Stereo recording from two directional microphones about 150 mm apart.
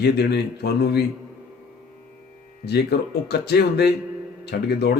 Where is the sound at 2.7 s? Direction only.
90° left.